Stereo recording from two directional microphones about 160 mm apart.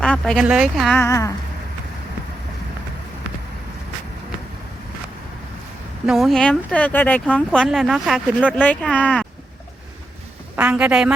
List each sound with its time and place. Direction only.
0.0 s speech: 5° left (ahead or behind)
0.9 s speech: 20° left (ahead or behind)
6.1 s speech: centre (ahead or behind)
8.5 s speech: 10° left (ahead or behind)
10.6 s a woman's voice: 10° right (ahead or behind)